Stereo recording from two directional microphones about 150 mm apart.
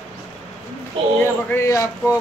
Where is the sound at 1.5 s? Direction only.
20° left (ahead or behind).